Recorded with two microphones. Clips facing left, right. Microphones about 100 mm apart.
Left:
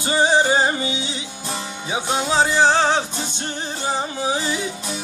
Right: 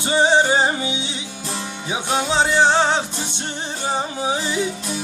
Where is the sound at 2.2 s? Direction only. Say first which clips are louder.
Even; 20° right (ahead or behind).